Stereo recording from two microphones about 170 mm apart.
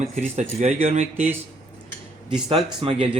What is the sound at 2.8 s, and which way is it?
Speech, 30° right (ahead or behind).